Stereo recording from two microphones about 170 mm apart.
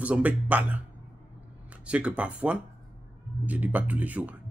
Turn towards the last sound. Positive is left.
turn(degrees=-10)  # may be behind; listen again after turning